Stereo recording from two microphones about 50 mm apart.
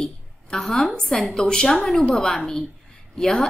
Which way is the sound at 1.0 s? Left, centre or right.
Centre.